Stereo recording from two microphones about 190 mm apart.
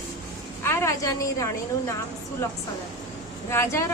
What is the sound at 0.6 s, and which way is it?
A woman's voice, 15° left (ahead or behind).